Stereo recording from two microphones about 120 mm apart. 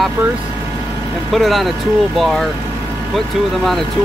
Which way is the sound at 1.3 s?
Centre (ahead or behind).